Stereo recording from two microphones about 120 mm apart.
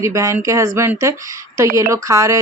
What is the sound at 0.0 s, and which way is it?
Speech, 25° right (ahead or behind).